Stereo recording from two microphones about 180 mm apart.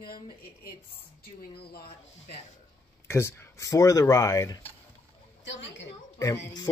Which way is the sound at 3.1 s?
15° left (ahead or behind).